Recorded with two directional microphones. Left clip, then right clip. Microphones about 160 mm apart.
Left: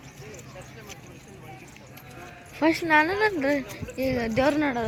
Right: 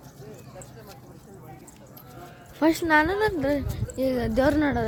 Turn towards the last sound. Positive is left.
turn(degrees=-30)  # may be behind; listen again after turning